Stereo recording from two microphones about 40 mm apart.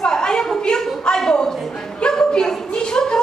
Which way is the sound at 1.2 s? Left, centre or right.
Centre.